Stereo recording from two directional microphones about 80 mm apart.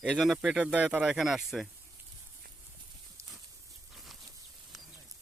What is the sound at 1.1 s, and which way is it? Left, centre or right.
Speech, centre.